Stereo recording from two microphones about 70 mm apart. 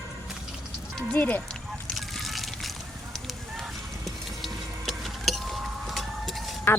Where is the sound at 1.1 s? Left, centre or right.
Left.